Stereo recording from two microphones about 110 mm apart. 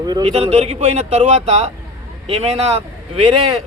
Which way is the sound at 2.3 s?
65° right (ahead or behind).